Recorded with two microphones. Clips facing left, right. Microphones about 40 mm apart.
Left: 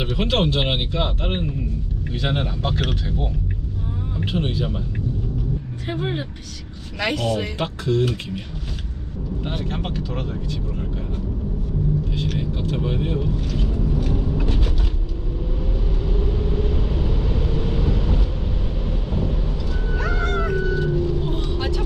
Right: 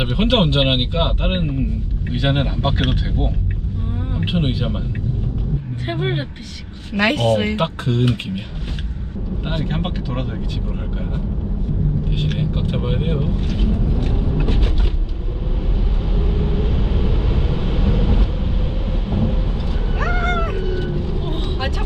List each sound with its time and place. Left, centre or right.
0.0 s speech: right
5.8 s speech: right
15.7 s vehicle: right